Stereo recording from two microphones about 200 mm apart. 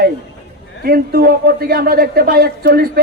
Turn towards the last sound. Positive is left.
turn(degrees=-50)  # may be behind; listen again after turning